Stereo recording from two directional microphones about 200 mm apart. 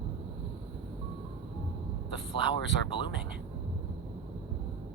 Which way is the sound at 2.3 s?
25° left (ahead or behind).